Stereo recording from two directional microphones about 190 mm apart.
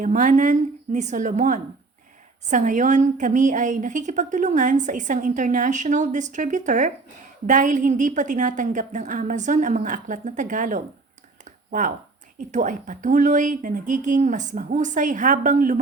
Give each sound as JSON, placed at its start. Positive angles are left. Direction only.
{"t": 0.0, "sound": "a woman's voice", "side_deg": -45}
{"t": 11.4, "sound": "a sound", "side_deg": -45}
{"t": 12.4, "sound": "a woman's voice", "side_deg": -40}